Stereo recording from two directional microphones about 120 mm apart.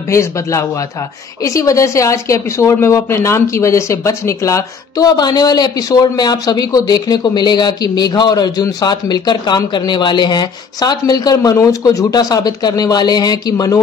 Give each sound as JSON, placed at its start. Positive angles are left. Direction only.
{"t": 0.1, "sound": "a man's voice", "side_deg": 25}